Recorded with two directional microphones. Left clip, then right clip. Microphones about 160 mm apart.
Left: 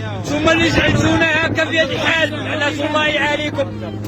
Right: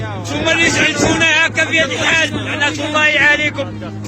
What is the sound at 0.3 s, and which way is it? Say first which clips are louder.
Speech: right 1 dB; 60° left (ahead or behind).